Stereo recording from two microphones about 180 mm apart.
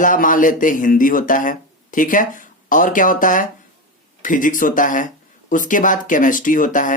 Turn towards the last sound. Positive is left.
turn(degrees=45)  # may be behind; listen again after turning